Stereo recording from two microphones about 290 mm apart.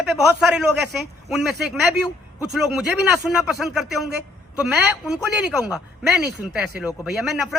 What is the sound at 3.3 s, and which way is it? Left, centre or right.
Speech, centre.